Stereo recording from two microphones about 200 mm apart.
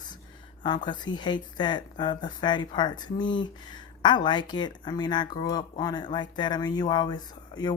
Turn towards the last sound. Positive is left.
turn(degrees=20)  # may be behind; listen again after turning